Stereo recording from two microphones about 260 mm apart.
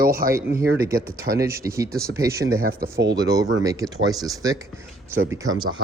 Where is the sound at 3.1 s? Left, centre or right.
Centre.